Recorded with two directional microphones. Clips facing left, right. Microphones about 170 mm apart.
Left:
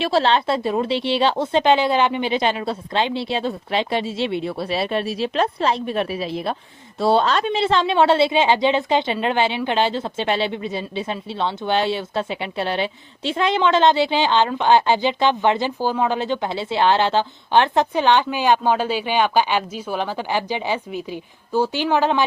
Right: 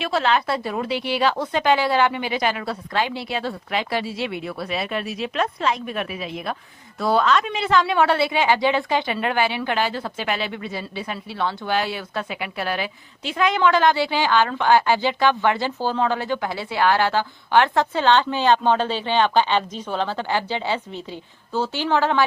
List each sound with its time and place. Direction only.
0.0 s speech: 30° left (ahead or behind)